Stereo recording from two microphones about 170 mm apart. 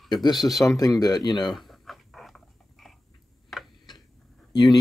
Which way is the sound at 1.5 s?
Centre (ahead or behind).